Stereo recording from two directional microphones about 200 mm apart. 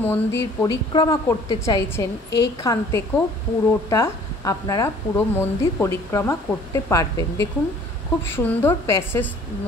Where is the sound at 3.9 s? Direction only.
15° left (ahead or behind).